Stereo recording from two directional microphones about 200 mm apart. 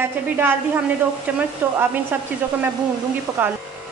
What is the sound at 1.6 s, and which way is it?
Speech, 10° right (ahead or behind).